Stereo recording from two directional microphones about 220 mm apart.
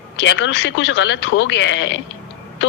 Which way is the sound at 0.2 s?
55° left (ahead or behind).